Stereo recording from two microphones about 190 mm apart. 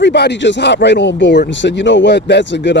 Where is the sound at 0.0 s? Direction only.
65° left (ahead or behind).